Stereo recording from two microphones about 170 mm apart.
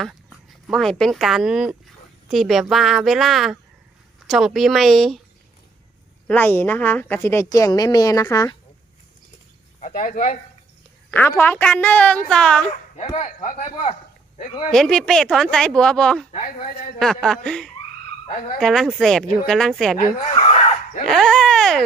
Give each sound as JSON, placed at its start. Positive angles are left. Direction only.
{"t": 0.0, "sound": "speech", "side_deg": 0}
{"t": 6.2, "sound": "a woman's voice", "side_deg": 10}
{"t": 9.8, "sound": "speech", "side_deg": 50}
{"t": 11.1, "sound": "a woman's voice", "side_deg": 10}
{"t": 13.1, "sound": "speech", "side_deg": 50}
{"t": 14.3, "sound": "speech", "side_deg": 35}
{"t": 14.7, "sound": "speech", "side_deg": 5}
{"t": 20.3, "sound": "dog", "side_deg": 35}
{"t": 21.1, "sound": "speech", "side_deg": 0}